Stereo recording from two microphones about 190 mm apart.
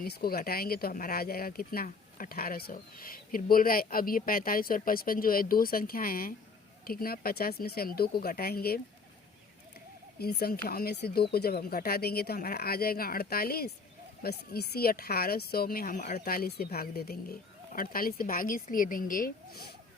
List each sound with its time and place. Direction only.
0.0 s speech: 50° left (ahead or behind)
10.2 s speech: 55° left (ahead or behind)